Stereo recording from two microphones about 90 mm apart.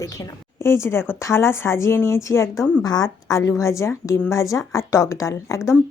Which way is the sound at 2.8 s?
45° left (ahead or behind).